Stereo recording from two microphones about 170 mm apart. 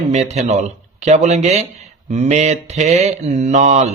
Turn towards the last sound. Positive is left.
turn(degrees=-40)  # may be behind; listen again after turning